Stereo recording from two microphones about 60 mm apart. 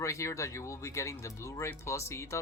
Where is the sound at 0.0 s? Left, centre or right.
Left.